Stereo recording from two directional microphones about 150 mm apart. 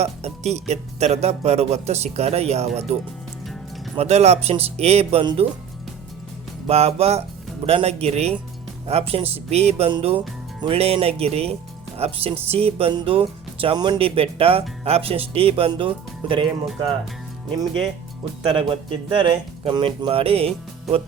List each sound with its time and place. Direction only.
0.0 s speech: 45° right (ahead or behind)
5.2 s speech: 30° right (ahead or behind)
6.7 s speech: 45° right (ahead or behind)
18.4 s speech: 35° right (ahead or behind)